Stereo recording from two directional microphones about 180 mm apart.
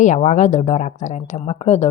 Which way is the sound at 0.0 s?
40° left (ahead or behind).